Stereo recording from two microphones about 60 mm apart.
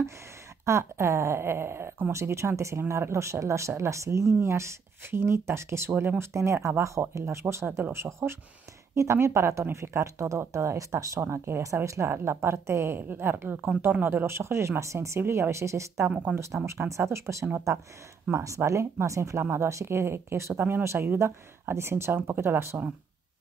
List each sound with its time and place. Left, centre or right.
0.7 s speech: right
16.1 s speech: right
16.6 s speech: right